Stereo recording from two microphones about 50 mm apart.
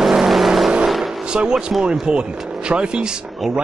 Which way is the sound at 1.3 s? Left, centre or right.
Centre.